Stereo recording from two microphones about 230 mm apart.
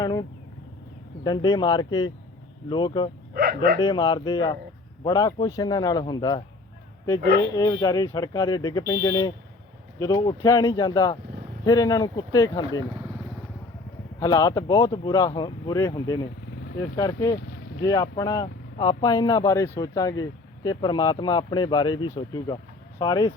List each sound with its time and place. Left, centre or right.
0.0 s a sound: centre
1.2 s speech: centre
3.3 s speech: right
3.8 s speech: centre
7.5 s speech: centre
14.2 s speech: centre